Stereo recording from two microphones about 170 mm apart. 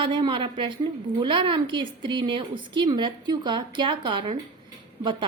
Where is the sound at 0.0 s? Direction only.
30° right (ahead or behind).